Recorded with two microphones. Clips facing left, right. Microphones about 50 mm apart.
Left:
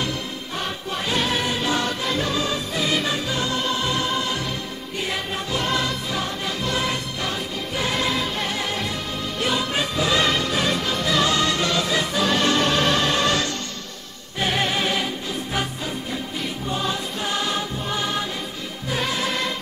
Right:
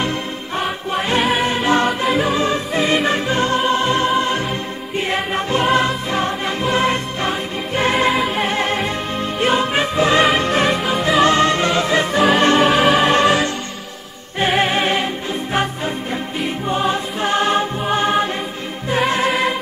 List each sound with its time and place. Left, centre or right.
0.6 s music: right
2.0 s music: centre
2.3 s music: right
8.1 s music: centre
8.5 s music: right
10.8 s music: centre
11.1 s music: right
12.5 s music: centre
14.4 s music: right
16.6 s music: right